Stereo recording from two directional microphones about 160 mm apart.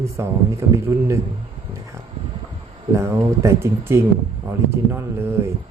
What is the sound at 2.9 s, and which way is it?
Speech, 20° right (ahead or behind).